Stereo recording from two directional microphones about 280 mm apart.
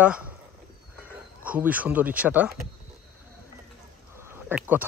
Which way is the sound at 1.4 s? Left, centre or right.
Centre.